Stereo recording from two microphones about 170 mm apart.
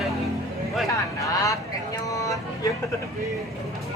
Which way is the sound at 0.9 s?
20° left (ahead or behind).